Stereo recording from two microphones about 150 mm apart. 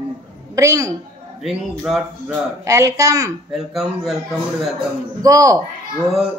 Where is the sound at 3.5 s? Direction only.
Centre (ahead or behind).